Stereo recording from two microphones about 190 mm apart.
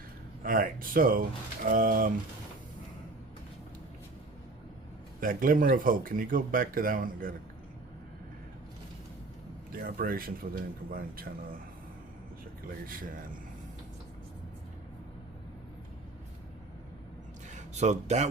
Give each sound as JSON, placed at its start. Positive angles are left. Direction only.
{"t": 0.4, "sound": "speech", "side_deg": -45}
{"t": 5.2, "sound": "speech", "side_deg": -45}
{"t": 9.7, "sound": "speech", "side_deg": -50}
{"t": 12.8, "sound": "speech", "side_deg": -45}
{"t": 17.5, "sound": "speech", "side_deg": -35}